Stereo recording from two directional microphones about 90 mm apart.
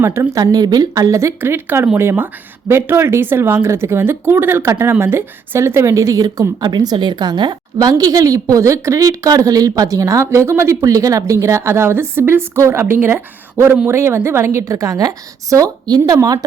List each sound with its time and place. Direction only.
0.0 s a woman's voice: 30° right (ahead or behind)
0.5 s speech: 45° right (ahead or behind)
1.4 s a woman's voice: 25° right (ahead or behind); by 16.4 s 45° right (ahead or behind)